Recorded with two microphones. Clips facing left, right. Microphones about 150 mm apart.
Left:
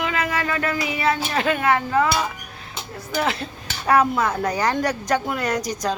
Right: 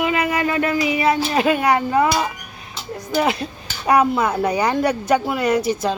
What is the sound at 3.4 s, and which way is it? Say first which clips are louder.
Speech: right 3 dB; 10° right (ahead or behind).